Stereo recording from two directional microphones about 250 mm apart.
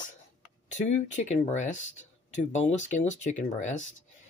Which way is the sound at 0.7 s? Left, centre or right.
Left.